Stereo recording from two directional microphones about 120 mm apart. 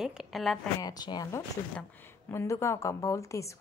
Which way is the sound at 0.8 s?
35° left (ahead or behind).